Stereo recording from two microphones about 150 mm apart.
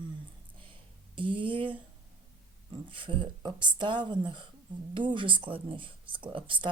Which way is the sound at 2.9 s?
35° right (ahead or behind).